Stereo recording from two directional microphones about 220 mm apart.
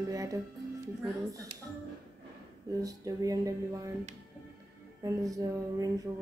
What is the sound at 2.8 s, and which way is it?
Speech, 15° right (ahead or behind).